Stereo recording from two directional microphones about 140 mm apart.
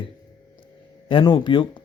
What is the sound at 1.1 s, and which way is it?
Speech, 35° left (ahead or behind).